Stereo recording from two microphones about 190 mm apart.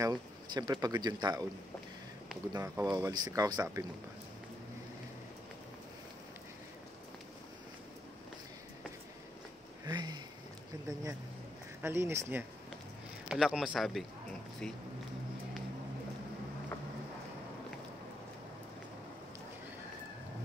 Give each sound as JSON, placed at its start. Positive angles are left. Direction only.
{"t": 0.0, "sound": "speech", "side_deg": -20}
{"t": 2.5, "sound": "speech", "side_deg": -15}
{"t": 9.8, "sound": "speech", "side_deg": -20}
{"t": 11.8, "sound": "speech", "side_deg": -15}